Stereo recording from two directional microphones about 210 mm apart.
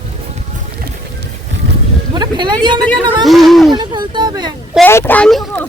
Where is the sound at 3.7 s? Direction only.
20° right (ahead or behind).